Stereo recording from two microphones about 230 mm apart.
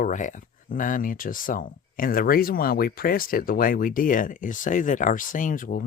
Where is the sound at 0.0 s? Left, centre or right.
Left.